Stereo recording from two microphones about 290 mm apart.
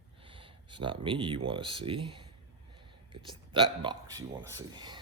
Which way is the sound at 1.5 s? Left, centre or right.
Centre.